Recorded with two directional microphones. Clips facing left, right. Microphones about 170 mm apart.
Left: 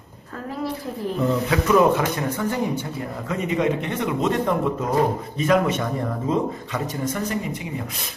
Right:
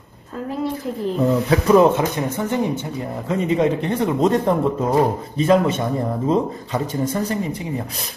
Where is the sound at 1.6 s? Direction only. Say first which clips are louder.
Right 3 dB; 25° right (ahead or behind).